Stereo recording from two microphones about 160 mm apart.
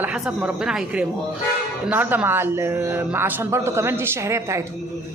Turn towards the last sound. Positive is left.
turn(degrees=-15)  # may be behind; listen again after turning